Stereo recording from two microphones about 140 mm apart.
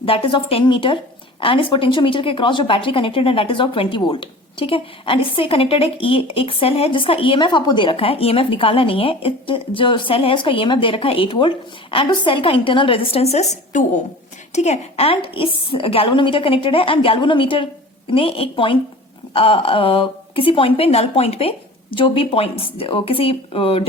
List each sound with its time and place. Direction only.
0.0 s speech: 40° left (ahead or behind)